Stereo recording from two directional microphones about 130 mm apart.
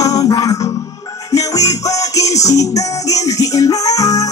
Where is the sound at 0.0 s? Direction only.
25° left (ahead or behind).